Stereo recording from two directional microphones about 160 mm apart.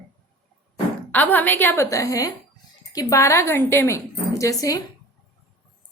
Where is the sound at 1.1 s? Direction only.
10° left (ahead or behind).